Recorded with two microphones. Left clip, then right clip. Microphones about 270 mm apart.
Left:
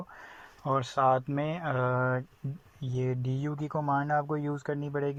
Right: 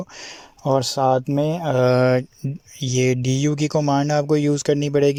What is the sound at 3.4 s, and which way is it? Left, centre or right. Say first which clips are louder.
Speech: right 13 dB; right.